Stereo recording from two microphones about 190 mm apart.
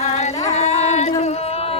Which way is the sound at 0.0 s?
35° left (ahead or behind).